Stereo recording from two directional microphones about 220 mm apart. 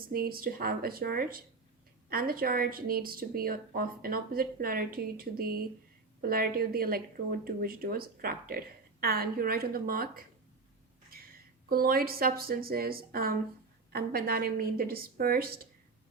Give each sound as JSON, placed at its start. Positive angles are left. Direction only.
{"t": 0.1, "sound": "speech", "side_deg": -40}
{"t": 11.7, "sound": "speech", "side_deg": -40}